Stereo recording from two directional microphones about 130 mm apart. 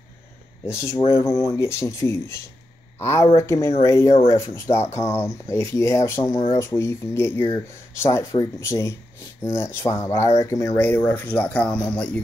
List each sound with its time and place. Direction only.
0.7 s speech: 20° left (ahead or behind)
10.8 s speech: 15° left (ahead or behind)